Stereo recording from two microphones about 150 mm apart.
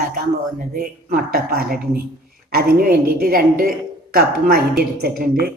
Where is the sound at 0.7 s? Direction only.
85° right.